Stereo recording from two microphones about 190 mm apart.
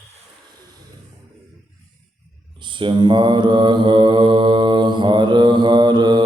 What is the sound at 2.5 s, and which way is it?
Mantra, 25° right (ahead or behind).